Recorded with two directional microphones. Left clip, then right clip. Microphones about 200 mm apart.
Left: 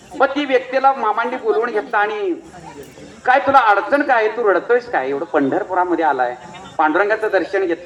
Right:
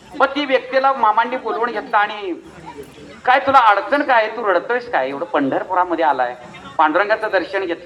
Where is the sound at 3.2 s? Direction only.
30° right (ahead or behind).